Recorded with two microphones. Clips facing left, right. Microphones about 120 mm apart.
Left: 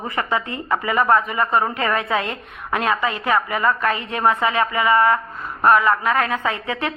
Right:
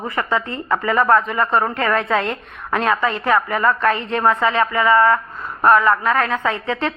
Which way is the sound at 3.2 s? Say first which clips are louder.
Right 2 dB; 10° left (ahead or behind).